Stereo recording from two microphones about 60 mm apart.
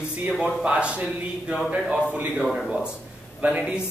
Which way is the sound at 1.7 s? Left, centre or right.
Centre.